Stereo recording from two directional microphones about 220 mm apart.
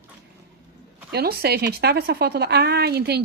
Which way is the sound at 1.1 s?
45° right (ahead or behind).